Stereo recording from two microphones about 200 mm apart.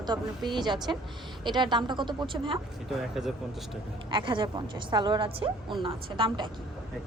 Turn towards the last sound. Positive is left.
turn(degrees=-25)  # may be behind; listen again after turning